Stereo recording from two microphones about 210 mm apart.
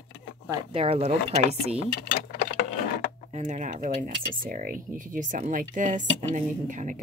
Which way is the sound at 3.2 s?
35° right (ahead or behind).